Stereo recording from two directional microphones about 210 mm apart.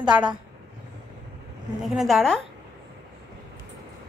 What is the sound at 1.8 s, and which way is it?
Speech, centre (ahead or behind).